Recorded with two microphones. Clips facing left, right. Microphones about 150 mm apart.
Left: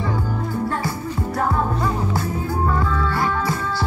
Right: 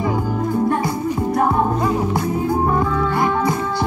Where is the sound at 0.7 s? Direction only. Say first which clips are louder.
Right 6 dB; 20° right (ahead or behind).